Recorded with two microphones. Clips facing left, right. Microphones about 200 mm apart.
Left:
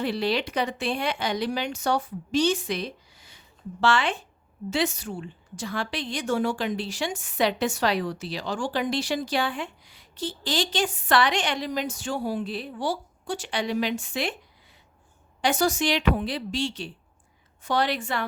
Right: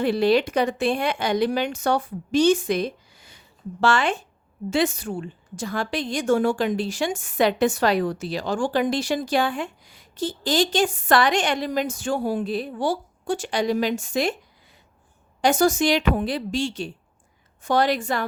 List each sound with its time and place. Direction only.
0.0 s a woman's voice: 50° right (ahead or behind)
15.4 s a woman's voice: 45° right (ahead or behind)